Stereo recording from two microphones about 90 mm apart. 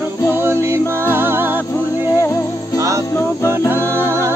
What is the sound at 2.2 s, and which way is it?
Music, 30° left (ahead or behind).